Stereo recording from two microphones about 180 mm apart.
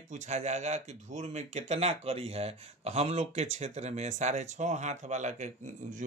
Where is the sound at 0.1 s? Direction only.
40° right (ahead or behind).